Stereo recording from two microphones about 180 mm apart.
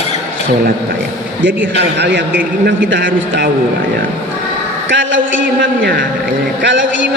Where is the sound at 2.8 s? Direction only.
80° right.